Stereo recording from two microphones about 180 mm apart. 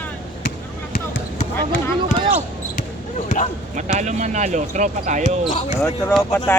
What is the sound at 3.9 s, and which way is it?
Speech, 40° right (ahead or behind).